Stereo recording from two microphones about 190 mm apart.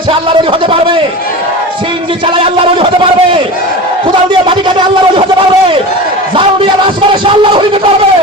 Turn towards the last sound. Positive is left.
turn(degrees=-25)  # may be behind; listen again after turning